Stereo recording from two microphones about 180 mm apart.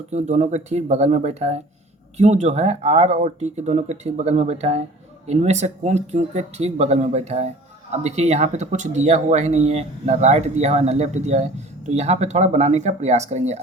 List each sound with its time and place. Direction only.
0.1 s speech: 40° right (ahead or behind)